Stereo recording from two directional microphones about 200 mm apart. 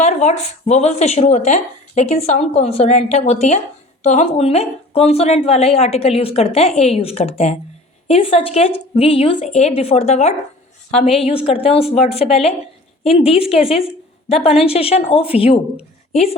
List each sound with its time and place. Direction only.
0.0 s a woman's voice: 35° left (ahead or behind)
13.4 s a woman's voice: 5° right (ahead or behind)
14.4 s a woman's voice: 30° left (ahead or behind)